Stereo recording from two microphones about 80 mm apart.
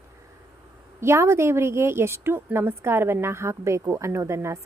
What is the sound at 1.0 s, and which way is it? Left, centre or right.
A woman's voice, right.